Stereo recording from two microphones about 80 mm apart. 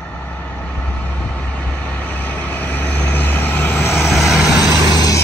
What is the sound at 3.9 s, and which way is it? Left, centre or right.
Vehicle, centre.